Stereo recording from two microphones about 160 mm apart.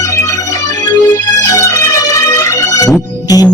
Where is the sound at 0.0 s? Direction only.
20° left (ahead or behind).